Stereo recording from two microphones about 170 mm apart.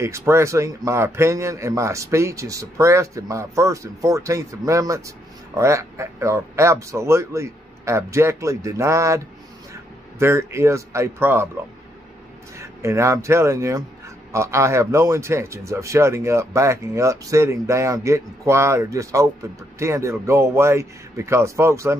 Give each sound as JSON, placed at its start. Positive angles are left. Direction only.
{"t": 0.0, "sound": "a man's voice", "side_deg": -15}
{"t": 12.5, "sound": "a man's voice", "side_deg": -15}